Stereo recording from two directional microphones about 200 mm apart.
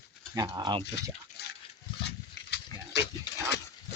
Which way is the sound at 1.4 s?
55° left (ahead or behind).